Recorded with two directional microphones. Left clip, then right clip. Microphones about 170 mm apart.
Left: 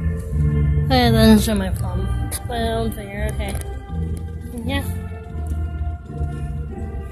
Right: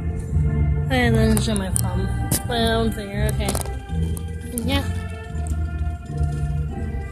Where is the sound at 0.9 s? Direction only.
30° left (ahead or behind).